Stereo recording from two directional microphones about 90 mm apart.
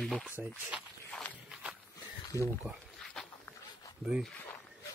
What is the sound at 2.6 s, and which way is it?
Speech, 15° right (ahead or behind).